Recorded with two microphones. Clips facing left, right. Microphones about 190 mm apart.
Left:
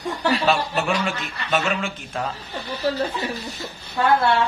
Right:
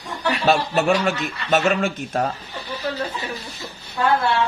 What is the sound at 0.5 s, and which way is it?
Speech, 45° right (ahead or behind).